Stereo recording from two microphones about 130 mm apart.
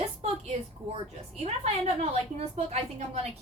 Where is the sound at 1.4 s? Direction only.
55° right (ahead or behind).